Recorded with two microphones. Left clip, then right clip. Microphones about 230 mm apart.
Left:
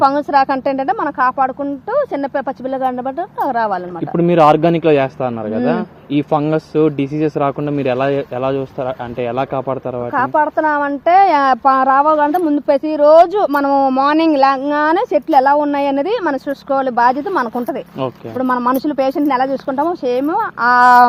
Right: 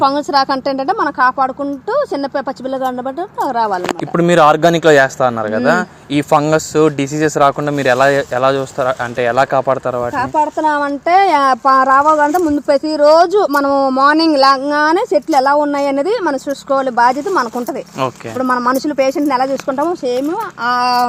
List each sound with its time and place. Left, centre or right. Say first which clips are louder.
0.0 s a woman's voice: even; left
3.4 s a woman's voice: right 1 dB; left
4.1 s speech: right 1 dB; centre
10.2 s speech: left 4 dB; left
12.6 s speech: right 1 dB; left
13.0 s speech: left 1 dB; left
14.2 s speech: right 1 dB; left
14.7 s speech: right 1 dB; left